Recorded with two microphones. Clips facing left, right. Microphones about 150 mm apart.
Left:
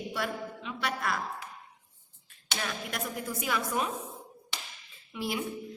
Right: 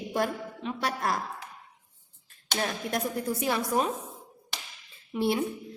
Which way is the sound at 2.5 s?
40° right (ahead or behind).